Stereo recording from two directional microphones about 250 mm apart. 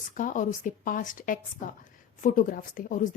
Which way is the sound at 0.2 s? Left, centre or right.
Left.